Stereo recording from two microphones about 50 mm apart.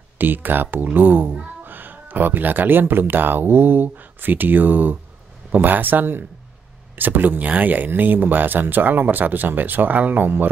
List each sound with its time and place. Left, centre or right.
0.2 s speech: right